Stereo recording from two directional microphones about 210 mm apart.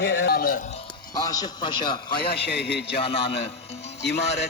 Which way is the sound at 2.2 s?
50° left (ahead or behind).